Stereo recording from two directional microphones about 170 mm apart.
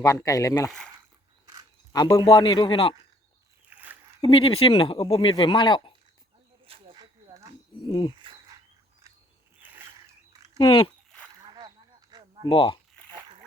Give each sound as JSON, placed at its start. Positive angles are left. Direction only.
{"t": 0.0, "sound": "speech", "side_deg": 20}
{"t": 1.9, "sound": "speech", "side_deg": 25}
{"t": 3.7, "sound": "a sound", "side_deg": -10}
{"t": 4.2, "sound": "speech", "side_deg": 30}
{"t": 6.7, "sound": "snake", "side_deg": -35}
{"t": 7.8, "sound": "speech", "side_deg": 25}
{"t": 9.6, "sound": "a sound", "side_deg": -10}
{"t": 10.6, "sound": "speech", "side_deg": 30}
{"t": 11.4, "sound": "a sound", "side_deg": -25}
{"t": 12.5, "sound": "speech", "side_deg": 30}